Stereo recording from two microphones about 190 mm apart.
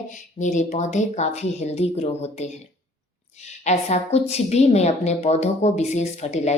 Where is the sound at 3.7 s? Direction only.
35° left (ahead or behind).